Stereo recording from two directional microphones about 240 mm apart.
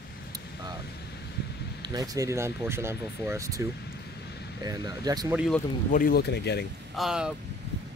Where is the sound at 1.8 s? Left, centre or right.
Centre.